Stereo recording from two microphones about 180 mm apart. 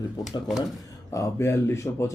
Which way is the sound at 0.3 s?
Centre (ahead or behind).